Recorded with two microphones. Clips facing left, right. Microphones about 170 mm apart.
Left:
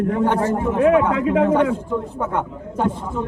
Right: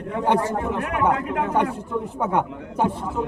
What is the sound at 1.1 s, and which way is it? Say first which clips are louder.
Speech: left 8 dB; 90° left.